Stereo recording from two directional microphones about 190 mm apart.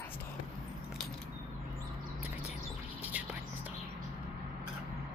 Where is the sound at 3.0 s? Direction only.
10° right (ahead or behind).